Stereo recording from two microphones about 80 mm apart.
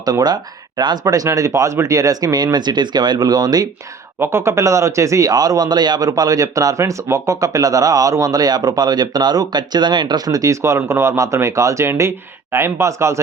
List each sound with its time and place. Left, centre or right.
0.0 s speech: right
1.0 s speech: right
4.2 s speech: right